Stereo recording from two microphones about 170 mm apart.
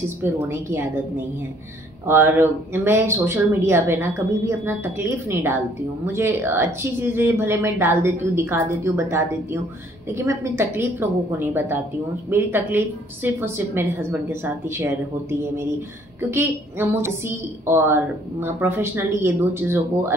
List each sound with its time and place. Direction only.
0.2 s a woman's voice: 15° right (ahead or behind)
2.0 s a woman's voice: 15° right (ahead or behind)